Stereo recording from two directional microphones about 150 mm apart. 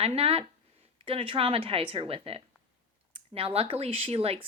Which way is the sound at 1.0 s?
35° right (ahead or behind).